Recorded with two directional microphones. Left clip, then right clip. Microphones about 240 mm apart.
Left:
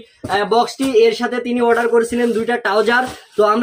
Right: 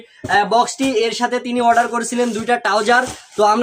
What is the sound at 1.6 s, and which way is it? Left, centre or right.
Speech, right.